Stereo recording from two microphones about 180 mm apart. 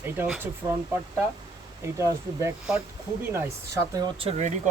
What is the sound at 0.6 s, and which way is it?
Speech, 25° right (ahead or behind).